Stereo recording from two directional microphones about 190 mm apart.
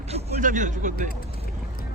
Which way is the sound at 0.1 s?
40° right (ahead or behind).